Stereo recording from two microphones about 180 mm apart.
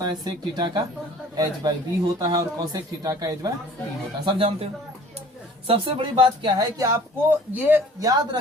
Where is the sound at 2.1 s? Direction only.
20° right (ahead or behind).